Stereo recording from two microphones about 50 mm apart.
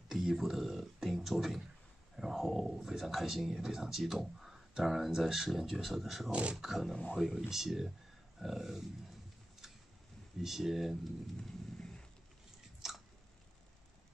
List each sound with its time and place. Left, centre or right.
0.1 s a sound: centre
2.1 s speech: centre
6.3 s speech: right
6.6 s speech: centre
10.4 s speech: centre
11.4 s a sound: centre
12.8 s chewing: centre